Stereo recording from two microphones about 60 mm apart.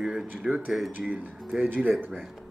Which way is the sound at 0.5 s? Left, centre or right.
Centre.